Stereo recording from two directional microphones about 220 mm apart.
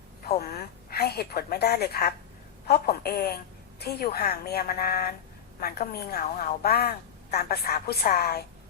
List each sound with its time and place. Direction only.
0.3 s a woman's voice: 45° left (ahead or behind)